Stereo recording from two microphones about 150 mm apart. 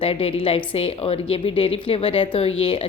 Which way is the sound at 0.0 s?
40° left (ahead or behind).